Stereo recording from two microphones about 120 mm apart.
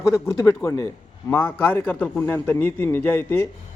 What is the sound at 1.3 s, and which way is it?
A man's voice, 15° left (ahead or behind).